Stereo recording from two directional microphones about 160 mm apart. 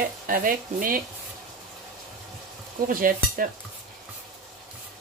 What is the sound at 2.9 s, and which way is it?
Speech, 60° right (ahead or behind).